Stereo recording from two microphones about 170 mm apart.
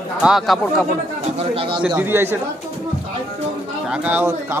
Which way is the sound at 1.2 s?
35° right (ahead or behind).